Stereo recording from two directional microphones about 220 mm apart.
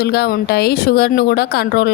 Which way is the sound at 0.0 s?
45° left (ahead or behind).